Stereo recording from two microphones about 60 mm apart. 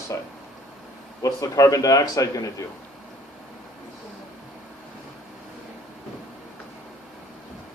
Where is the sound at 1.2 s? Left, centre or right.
Left.